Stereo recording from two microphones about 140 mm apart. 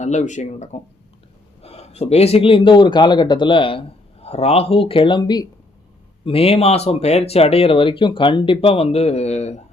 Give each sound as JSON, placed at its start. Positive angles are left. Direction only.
{"t": 0.0, "sound": "speech", "side_deg": 60}
{"t": 6.2, "sound": "speech", "side_deg": 45}